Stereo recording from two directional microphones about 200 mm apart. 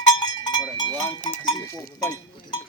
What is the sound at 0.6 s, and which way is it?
Speech, 20° left (ahead or behind).